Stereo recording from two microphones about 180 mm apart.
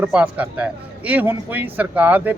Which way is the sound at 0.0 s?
10° right (ahead or behind).